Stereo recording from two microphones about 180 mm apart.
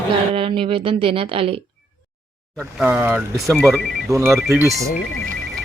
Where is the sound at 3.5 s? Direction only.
Centre (ahead or behind).